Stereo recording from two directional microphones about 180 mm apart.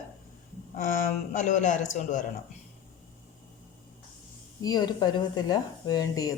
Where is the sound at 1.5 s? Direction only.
45° left (ahead or behind).